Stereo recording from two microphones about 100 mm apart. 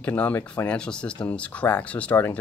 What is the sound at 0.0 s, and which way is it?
Speech, 15° left (ahead or behind).